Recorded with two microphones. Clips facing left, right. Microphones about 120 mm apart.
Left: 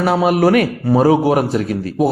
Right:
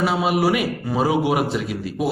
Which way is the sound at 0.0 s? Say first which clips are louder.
Left 6 dB; 50° left (ahead or behind).